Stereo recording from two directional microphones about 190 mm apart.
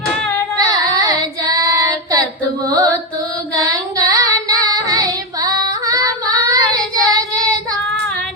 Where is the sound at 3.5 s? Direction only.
20° right (ahead or behind).